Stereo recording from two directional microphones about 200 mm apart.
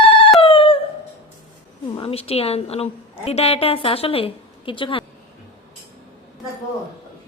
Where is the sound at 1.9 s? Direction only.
30° left (ahead or behind).